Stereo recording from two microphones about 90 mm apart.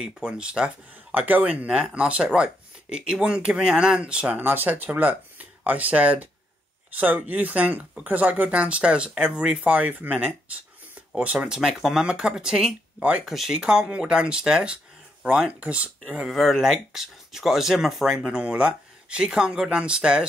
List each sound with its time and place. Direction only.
0.0 s speech: 10° right (ahead or behind)
11.3 s speech: 5° right (ahead or behind)
16.3 s speech: centre (ahead or behind)